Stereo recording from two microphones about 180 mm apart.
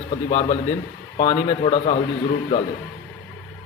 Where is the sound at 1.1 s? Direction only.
25° left (ahead or behind).